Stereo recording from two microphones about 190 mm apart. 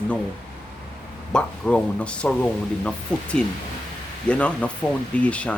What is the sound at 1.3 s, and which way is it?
Speech, 5° left (ahead or behind).